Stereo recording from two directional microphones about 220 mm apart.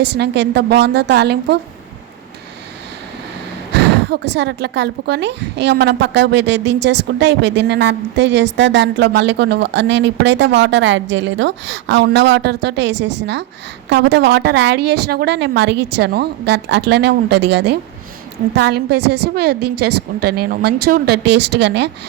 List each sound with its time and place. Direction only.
0.0 s speech: 50° right (ahead or behind)
3.7 s speech: 50° right (ahead or behind)